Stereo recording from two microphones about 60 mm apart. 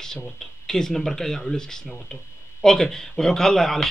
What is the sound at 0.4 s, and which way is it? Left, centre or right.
A man's voice, centre.